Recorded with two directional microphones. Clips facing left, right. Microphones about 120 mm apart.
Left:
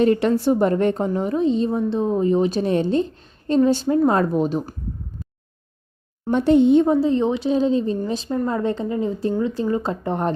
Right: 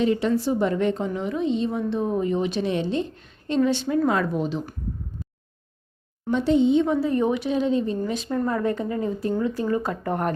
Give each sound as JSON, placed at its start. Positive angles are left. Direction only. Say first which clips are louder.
{"t": 0.0, "sound": "a woman's voice", "louder": "left 4 dB", "side_deg": 55}
{"t": 6.3, "sound": "speech", "louder": "left 4 dB", "side_deg": 55}
{"t": 6.8, "sound": "a woman's voice", "louder": "left 5 dB", "side_deg": 35}
{"t": 7.1, "sound": "a woman's voice", "louder": "left 3 dB", "side_deg": 25}
{"t": 8.3, "sound": "speech", "louder": "left 2 dB", "side_deg": 20}